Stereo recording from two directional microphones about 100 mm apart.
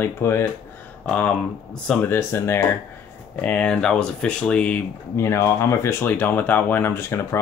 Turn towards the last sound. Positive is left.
turn(degrees=25)  # may be behind; listen again after turning